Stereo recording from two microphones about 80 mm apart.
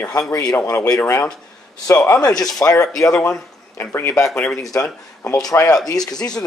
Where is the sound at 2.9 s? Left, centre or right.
Centre.